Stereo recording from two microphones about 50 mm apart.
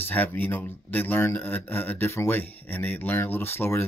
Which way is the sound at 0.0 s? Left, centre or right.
Left.